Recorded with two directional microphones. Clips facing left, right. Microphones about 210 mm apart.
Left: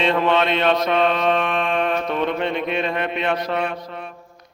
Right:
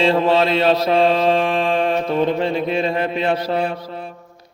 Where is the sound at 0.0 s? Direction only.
30° right (ahead or behind).